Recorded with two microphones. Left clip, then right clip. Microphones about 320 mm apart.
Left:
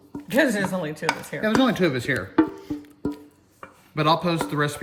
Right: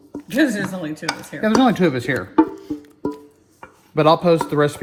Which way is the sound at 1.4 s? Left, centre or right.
Centre.